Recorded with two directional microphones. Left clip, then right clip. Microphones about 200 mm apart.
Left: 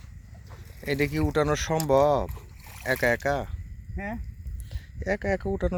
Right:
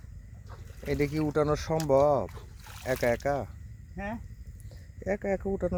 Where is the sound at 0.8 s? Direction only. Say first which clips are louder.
Left 3 dB; centre (ahead or behind).